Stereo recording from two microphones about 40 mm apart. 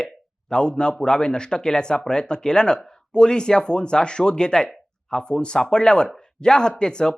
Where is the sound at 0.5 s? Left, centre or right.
Left.